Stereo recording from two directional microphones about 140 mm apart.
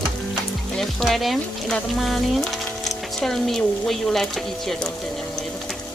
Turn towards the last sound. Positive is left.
turn(degrees=0)  # may be behind; listen again after turning